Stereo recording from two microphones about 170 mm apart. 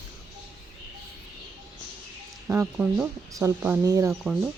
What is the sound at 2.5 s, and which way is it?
Speech, 10° right (ahead or behind).